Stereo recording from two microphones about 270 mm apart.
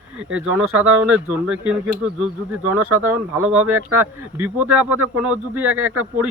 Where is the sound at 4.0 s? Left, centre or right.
Centre.